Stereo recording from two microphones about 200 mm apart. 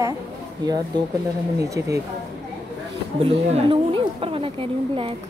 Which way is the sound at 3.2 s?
25° right (ahead or behind).